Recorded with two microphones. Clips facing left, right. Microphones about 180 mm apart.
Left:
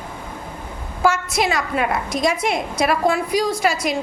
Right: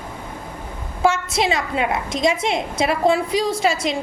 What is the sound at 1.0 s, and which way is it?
A woman's voice, 25° right (ahead or behind).